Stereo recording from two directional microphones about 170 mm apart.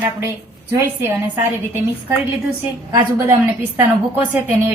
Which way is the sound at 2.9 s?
15° right (ahead or behind).